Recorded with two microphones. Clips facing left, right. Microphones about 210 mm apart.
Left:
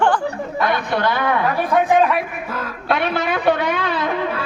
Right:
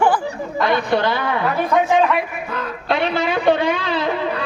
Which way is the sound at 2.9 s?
55° left (ahead or behind).